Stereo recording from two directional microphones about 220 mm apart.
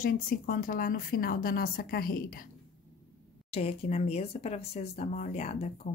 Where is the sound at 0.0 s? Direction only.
40° left (ahead or behind).